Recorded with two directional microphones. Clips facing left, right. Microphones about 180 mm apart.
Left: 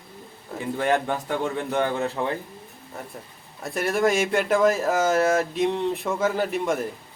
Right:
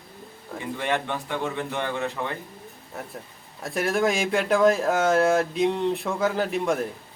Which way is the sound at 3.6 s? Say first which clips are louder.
Left 1 dB; centre (ahead or behind).